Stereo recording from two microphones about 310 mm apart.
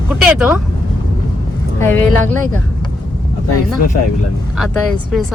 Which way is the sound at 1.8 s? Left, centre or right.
Centre.